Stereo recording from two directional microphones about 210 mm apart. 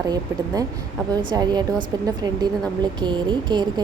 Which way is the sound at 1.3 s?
20° right (ahead or behind).